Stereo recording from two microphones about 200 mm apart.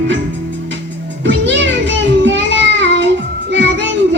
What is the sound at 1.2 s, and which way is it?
Music, 65° right (ahead or behind).